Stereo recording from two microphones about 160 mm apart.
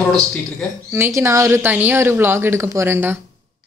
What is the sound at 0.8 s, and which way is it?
Speech, 15° right (ahead or behind).